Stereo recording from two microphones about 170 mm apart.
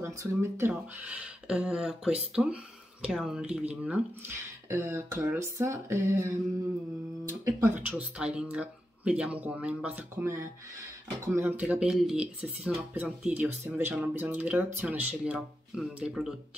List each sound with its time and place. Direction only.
0.0 s speech: 15° right (ahead or behind)
8.0 s speech: 5° right (ahead or behind)